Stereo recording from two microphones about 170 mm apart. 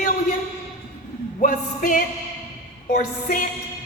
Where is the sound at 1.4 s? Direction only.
50° left (ahead or behind).